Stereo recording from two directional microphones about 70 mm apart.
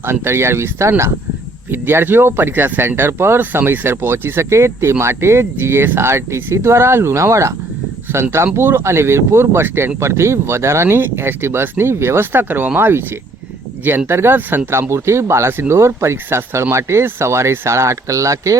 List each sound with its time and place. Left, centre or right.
0.0 s speech: right
14.1 s speech: right